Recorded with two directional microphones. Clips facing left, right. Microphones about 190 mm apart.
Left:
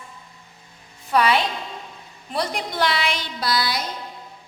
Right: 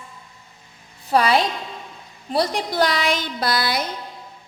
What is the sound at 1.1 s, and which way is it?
A woman's voice, 35° right (ahead or behind).